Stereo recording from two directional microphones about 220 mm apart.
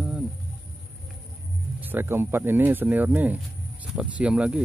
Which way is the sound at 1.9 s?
10° right (ahead or behind).